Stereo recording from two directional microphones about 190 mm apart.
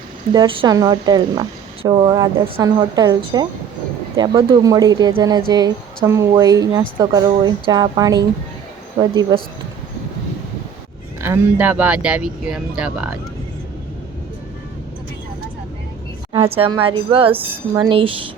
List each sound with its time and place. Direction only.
0.3 s speech: 25° right (ahead or behind)
11.2 s speech: 10° right (ahead or behind)
16.3 s speech: 30° right (ahead or behind)